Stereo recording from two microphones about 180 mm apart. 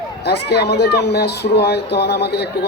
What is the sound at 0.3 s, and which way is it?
Speech, 65° left (ahead or behind).